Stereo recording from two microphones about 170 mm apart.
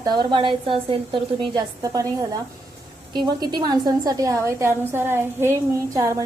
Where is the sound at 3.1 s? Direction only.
25° right (ahead or behind).